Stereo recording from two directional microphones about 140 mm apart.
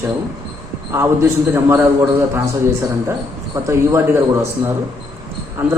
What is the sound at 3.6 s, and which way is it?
Speech, 15° right (ahead or behind).